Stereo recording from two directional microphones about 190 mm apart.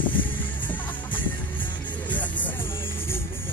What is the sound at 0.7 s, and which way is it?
Music, 10° left (ahead or behind).